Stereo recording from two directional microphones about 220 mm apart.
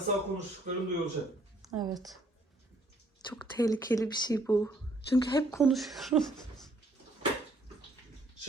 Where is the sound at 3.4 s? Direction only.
20° left (ahead or behind).